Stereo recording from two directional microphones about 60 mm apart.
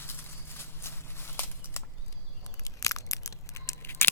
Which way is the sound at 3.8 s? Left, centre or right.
Left.